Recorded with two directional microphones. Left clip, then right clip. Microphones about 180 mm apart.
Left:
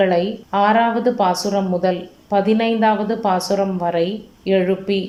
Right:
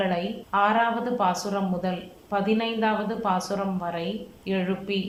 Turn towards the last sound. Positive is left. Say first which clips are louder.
# left 11 dB
turn(degrees=30)  # may be behind; listen again after turning